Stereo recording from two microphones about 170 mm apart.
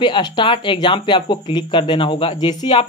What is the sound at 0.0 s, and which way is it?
Speech, 30° left (ahead or behind).